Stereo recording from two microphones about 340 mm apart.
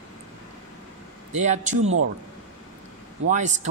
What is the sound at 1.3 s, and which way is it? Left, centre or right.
Speech, right.